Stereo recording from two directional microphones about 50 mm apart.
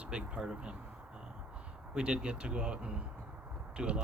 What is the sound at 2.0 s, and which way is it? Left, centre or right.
Speech, centre.